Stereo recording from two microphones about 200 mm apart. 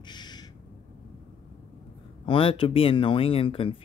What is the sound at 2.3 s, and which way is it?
Speech, 25° left (ahead or behind).